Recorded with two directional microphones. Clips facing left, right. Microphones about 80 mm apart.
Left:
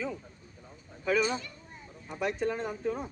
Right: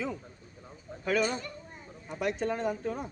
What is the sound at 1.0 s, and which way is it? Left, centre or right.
Speech, right.